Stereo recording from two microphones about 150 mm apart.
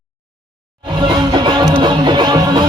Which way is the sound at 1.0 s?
30° right (ahead or behind).